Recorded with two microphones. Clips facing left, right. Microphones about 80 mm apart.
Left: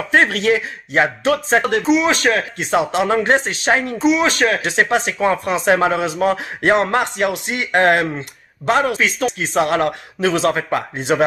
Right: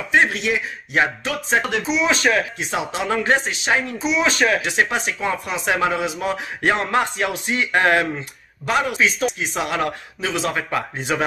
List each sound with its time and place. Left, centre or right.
0.1 s speech: left
1.2 s speech: left
1.9 s speech: left
2.5 s speech: left
4.0 s speech: left
4.6 s speech: left
11.0 s speech: left